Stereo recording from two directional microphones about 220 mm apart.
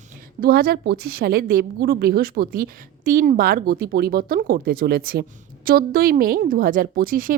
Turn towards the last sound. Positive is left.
turn(degrees=-40)  # may be behind; listen again after turning